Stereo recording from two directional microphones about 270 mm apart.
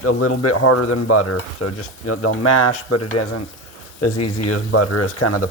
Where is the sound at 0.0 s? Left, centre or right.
Left.